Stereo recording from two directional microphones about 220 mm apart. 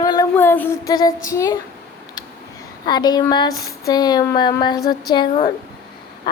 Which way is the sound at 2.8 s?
20° left (ahead or behind).